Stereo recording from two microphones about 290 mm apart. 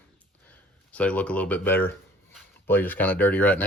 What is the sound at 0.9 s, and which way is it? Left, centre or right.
Speech, centre.